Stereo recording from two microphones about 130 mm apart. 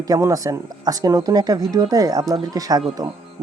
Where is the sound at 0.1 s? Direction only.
25° right (ahead or behind).